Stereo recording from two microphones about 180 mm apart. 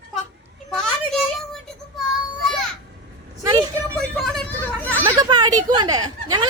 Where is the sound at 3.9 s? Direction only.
Centre (ahead or behind).